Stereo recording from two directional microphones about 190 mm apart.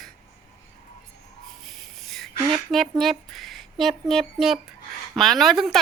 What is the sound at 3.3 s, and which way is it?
Speech, centre (ahead or behind).